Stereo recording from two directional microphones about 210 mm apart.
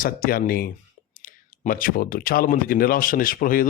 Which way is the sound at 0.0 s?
45° left (ahead or behind).